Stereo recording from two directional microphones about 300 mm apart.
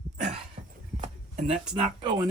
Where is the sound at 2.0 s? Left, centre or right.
Centre.